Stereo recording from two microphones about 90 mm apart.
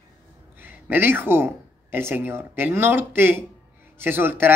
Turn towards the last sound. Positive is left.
turn(degrees=-25)  # may be behind; listen again after turning